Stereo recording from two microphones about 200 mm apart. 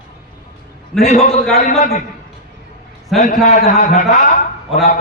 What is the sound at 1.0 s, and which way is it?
A man's voice, 35° left (ahead or behind).